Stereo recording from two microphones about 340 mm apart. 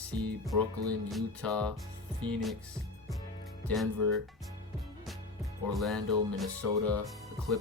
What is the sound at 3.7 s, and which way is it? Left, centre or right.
Speech, centre.